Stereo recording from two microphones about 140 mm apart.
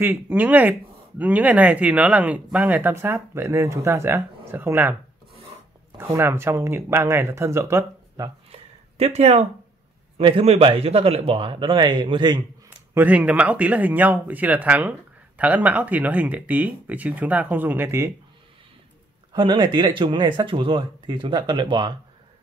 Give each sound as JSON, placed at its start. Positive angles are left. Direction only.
{"t": 0.0, "sound": "speech", "side_deg": -15}
{"t": 5.9, "sound": "speech", "side_deg": -20}
{"t": 8.5, "sound": "a sound", "side_deg": -50}
{"t": 10.1, "sound": "speech", "side_deg": -40}
{"t": 12.9, "sound": "speech", "side_deg": -10}
{"t": 19.3, "sound": "speech", "side_deg": -35}